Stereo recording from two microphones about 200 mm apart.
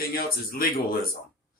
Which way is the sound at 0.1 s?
50° left (ahead or behind).